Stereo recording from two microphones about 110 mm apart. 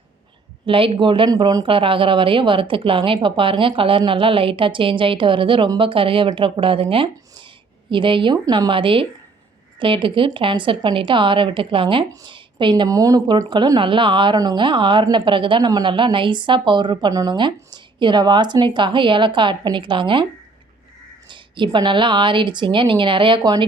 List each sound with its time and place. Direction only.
0.6 s speech: 55° right (ahead or behind)
1.3 s speech: 35° right (ahead or behind)
1.7 s speech: 55° right (ahead or behind)
12.9 s speech: 30° right (ahead or behind); by 20.2 s 50° right (ahead or behind)
21.2 s speech: 45° right (ahead or behind)
23.4 s speech: 40° right (ahead or behind)